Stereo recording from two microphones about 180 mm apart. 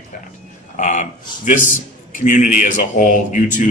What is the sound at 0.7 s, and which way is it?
A man's voice, 45° left (ahead or behind).